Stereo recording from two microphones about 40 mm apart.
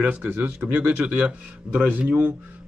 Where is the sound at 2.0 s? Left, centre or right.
Right.